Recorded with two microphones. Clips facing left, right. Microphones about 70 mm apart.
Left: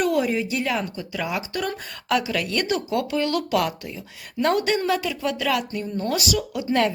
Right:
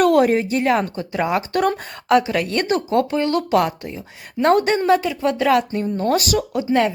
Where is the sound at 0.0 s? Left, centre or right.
Right.